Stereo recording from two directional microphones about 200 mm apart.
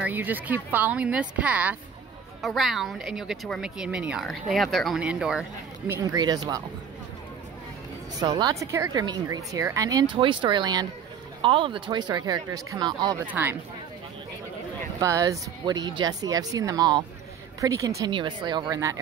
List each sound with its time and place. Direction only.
0.0 s speech: 10° right (ahead or behind)
5.9 s a woman's voice: 15° right (ahead or behind)
8.2 s a woman's voice: 20° right (ahead or behind)
13.2 s speech: 10° right (ahead or behind)
15.0 s a woman's voice: 15° right (ahead or behind)